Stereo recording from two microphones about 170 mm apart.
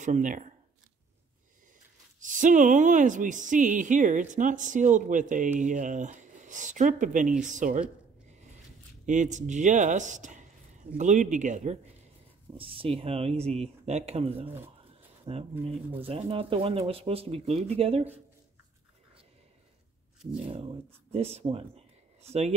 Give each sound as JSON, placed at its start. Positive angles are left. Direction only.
{"t": 0.0, "sound": "speech", "side_deg": -45}
{"t": 2.2, "sound": "speech", "side_deg": -50}
{"t": 9.0, "sound": "speech", "side_deg": -45}
{"t": 12.5, "sound": "speech", "side_deg": -30}
{"t": 20.3, "sound": "speech", "side_deg": -35}